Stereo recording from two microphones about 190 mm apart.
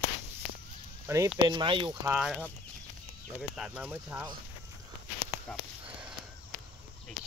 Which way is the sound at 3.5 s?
5° right (ahead or behind).